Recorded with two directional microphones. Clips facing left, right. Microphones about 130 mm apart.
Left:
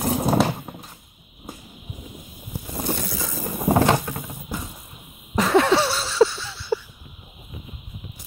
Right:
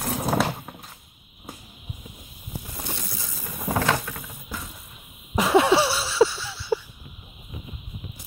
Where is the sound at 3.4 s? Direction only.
35° left (ahead or behind).